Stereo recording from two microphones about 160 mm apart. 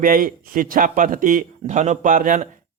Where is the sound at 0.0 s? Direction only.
60° right (ahead or behind).